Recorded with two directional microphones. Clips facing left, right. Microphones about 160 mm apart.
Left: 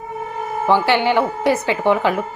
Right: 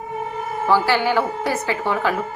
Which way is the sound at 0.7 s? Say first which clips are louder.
Left 2 dB; 20° left (ahead or behind).